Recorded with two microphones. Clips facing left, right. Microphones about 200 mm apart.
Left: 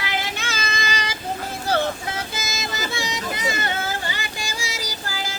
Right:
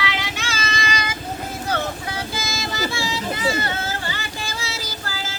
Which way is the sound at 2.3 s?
20° left (ahead or behind).